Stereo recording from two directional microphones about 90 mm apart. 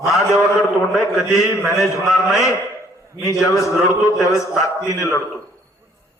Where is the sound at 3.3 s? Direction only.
35° left (ahead or behind).